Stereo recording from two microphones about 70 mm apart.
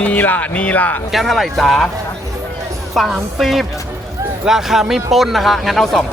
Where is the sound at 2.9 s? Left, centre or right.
Centre.